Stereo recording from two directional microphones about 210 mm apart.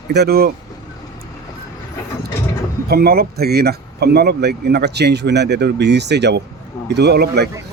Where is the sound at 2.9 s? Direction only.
45° right (ahead or behind).